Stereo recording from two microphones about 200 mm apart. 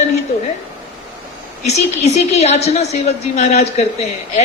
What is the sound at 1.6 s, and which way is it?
A woman's voice, 35° left (ahead or behind).